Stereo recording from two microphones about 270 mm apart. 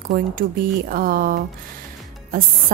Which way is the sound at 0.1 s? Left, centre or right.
Right.